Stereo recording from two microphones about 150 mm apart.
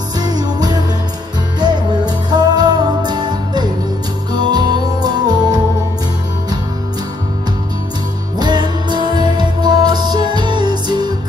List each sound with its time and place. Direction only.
0.2 s music: 25° right (ahead or behind)
8.4 s music: 30° right (ahead or behind)